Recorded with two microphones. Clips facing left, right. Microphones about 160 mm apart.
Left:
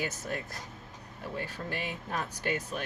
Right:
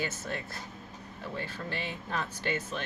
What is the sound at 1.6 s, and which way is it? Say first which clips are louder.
Speech: even; 10° left (ahead or behind).